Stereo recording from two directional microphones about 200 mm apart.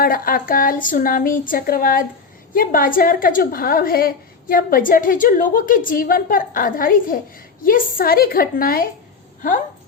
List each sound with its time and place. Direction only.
0.0 s a woman's voice: 45° left (ahead or behind)